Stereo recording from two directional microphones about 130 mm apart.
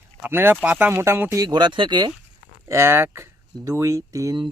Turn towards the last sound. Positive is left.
turn(degrees=-25)  # may be behind; listen again after turning